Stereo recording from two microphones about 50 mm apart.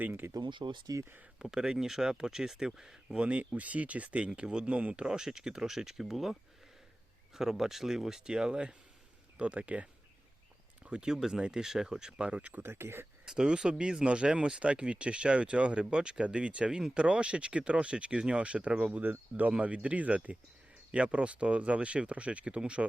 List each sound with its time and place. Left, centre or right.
0.0 s speech: right
1.4 s speech: centre
3.2 s speech: right
4.3 s speech: centre
5.0 s speech: centre
7.3 s speech: centre; by 12.5 s right
12.5 s speech: right
13.2 s speech: centre
19.4 s speech: right